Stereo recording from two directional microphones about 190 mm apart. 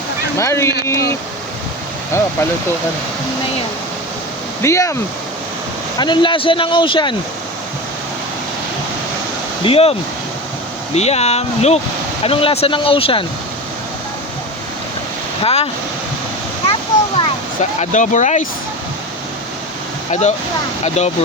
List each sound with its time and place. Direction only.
0.3 s speech: 15° left (ahead or behind)
4.6 s speech: 15° left (ahead or behind)
6.0 s speech: 25° left (ahead or behind)
9.6 s speech: 30° left (ahead or behind)
10.9 s speech: 35° left (ahead or behind)
15.4 s speech: 30° left (ahead or behind)
17.2 s speech: 35° left (ahead or behind)
20.1 s speech: 35° left (ahead or behind)